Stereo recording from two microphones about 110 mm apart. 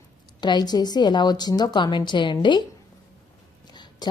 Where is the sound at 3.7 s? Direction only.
40° left (ahead or behind).